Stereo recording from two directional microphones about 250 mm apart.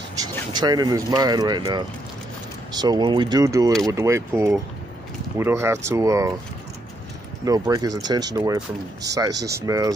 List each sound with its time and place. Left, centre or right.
0.2 s speech: centre
7.4 s speech: centre